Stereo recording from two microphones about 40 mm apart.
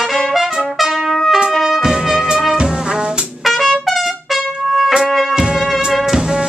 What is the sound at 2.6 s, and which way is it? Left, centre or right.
Music, right.